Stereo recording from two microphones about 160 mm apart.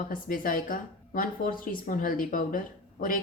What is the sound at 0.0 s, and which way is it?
A woman's voice, 60° left (ahead or behind).